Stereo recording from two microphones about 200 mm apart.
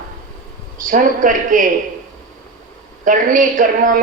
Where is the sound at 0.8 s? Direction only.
40° right (ahead or behind).